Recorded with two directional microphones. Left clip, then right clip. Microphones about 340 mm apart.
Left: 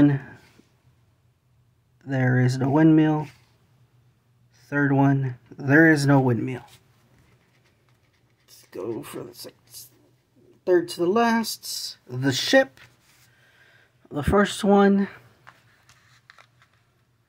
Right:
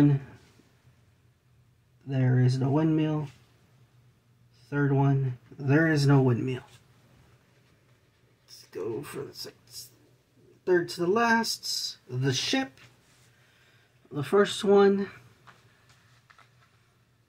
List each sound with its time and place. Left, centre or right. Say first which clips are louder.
2.0 s speech: left 6 dB; left
4.6 s speech: left 6 dB; left
8.6 s speech: left 2 dB; left
10.6 s speech: left 5 dB; left
14.1 s speech: left 3 dB; left